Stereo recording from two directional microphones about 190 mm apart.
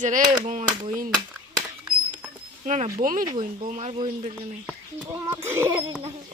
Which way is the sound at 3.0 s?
45° right (ahead or behind).